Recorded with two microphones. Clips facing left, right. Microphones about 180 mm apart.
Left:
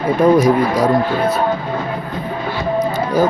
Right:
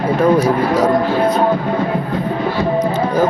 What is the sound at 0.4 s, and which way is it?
Speech, 10° left (ahead or behind).